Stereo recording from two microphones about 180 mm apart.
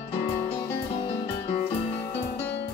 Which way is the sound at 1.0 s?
30° left (ahead or behind).